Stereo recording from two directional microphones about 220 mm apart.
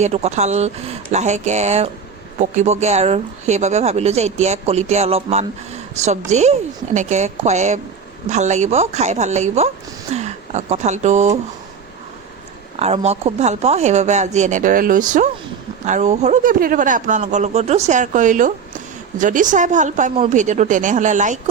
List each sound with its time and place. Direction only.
0.0 s speech: 30° right (ahead or behind)
12.8 s speech: 30° right (ahead or behind)